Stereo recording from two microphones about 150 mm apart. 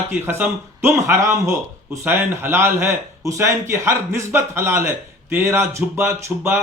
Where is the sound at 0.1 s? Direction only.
15° right (ahead or behind).